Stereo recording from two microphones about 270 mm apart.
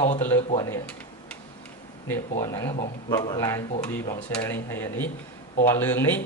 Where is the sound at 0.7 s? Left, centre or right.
Centre.